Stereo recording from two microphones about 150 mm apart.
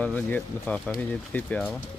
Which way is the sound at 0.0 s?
10° left (ahead or behind).